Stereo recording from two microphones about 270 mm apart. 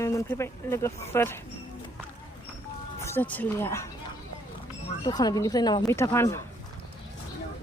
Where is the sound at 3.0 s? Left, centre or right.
Centre.